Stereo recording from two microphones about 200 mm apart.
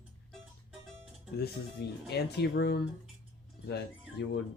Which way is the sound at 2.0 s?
55° left (ahead or behind).